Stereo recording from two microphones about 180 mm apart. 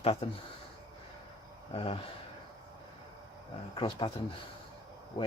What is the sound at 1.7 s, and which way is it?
Speech, 30° left (ahead or behind).